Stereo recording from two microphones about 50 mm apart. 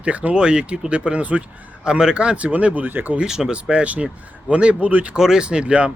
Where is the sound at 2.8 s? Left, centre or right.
Right.